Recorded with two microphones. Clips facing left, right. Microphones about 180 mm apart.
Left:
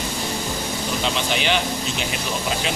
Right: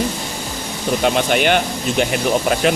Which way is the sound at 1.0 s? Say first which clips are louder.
Right 8 dB; 55° right (ahead or behind).